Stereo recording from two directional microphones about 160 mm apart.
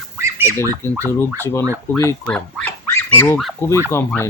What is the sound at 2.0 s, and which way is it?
Speech, 15° left (ahead or behind).